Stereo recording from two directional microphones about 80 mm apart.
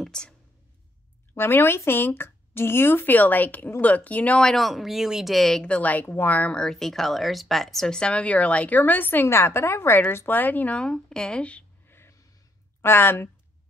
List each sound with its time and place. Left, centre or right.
0.0 s whispering: centre
1.3 s a woman's voice: left
4.4 s speech: centre
5.6 s a woman's voice: centre
6.6 s speech: centre
11.9 s a sound: left
12.8 s a woman's voice: left